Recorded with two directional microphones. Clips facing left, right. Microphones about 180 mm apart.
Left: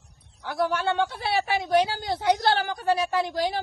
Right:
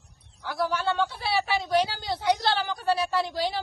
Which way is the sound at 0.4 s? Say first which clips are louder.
Left 2 dB; 55° left (ahead or behind).